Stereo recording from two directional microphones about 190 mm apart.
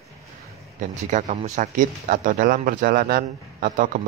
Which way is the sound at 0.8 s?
40° right (ahead or behind).